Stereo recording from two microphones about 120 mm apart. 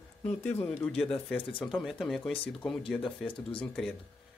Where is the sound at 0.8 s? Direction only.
5° left (ahead or behind).